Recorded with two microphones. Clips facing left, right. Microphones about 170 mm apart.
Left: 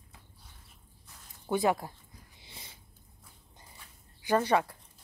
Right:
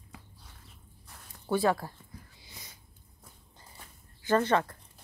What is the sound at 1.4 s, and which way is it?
Speech, 15° left (ahead or behind).